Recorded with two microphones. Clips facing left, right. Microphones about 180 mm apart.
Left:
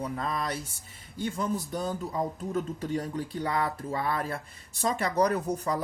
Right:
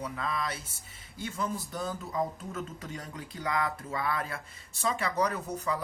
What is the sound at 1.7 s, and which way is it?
Speech, 35° left (ahead or behind).